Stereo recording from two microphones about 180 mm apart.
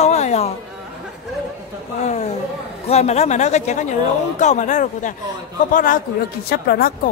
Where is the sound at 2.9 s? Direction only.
35° left (ahead or behind).